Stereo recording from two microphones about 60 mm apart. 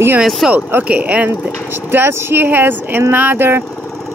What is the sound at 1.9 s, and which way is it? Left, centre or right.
Speech, right.